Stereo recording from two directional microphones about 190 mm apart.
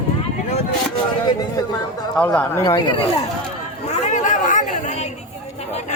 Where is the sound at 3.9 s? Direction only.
40° left (ahead or behind).